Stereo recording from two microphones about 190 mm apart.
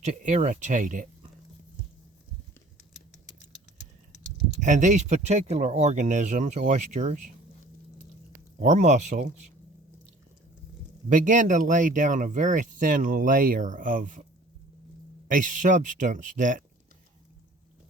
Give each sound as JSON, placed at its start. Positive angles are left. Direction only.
{"t": 0.0, "sound": "speech", "side_deg": -40}
{"t": 4.6, "sound": "speech", "side_deg": -40}
{"t": 8.5, "sound": "speech", "side_deg": -40}
{"t": 11.1, "sound": "speech", "side_deg": -40}
{"t": 15.3, "sound": "speech", "side_deg": -45}